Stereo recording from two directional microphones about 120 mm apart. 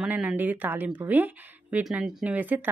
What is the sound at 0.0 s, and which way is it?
Speech, 10° right (ahead or behind).